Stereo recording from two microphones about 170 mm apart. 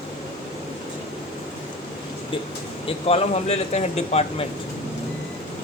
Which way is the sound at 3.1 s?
40° left (ahead or behind).